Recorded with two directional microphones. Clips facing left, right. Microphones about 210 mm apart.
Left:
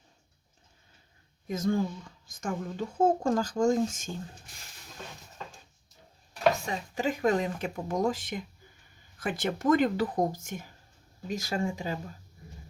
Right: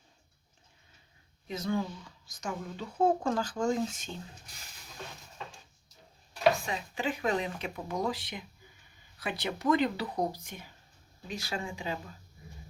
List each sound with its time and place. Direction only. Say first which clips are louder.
1.5 s a woman's voice: left 4 dB; 45° left (ahead or behind)
6.7 s a woman's voice: left 3 dB; 40° left (ahead or behind)